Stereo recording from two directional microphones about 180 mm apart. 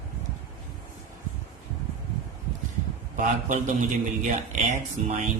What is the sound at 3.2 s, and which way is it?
Speech, 45° right (ahead or behind).